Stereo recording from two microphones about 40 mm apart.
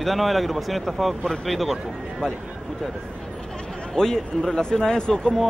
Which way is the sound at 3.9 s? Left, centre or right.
Centre.